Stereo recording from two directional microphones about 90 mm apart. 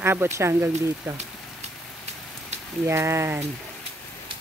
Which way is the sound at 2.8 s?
30° right (ahead or behind).